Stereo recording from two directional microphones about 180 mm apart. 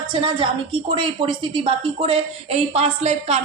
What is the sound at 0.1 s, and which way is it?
A woman's voice, 25° right (ahead or behind).